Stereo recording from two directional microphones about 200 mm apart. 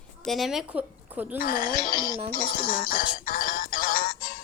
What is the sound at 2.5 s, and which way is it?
Music, 45° left (ahead or behind).